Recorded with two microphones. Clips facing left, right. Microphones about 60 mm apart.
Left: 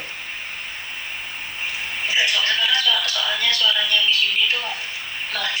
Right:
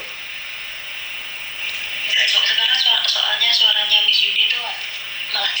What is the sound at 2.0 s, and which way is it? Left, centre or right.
Music, right.